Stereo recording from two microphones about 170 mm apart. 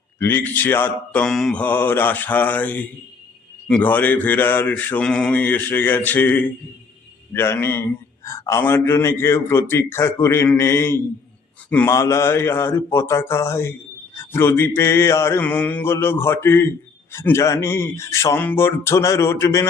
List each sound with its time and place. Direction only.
0.2 s a man's voice: 10° left (ahead or behind)